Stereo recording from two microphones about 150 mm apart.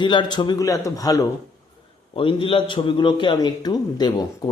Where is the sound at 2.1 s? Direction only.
35° left (ahead or behind).